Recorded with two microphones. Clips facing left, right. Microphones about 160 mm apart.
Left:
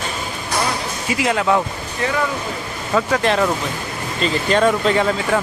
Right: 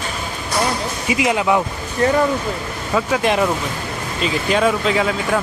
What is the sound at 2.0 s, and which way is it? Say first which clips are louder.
Speech: right 6 dB; 40° right (ahead or behind).